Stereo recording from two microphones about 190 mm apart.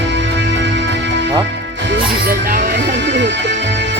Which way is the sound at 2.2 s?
55° right (ahead or behind).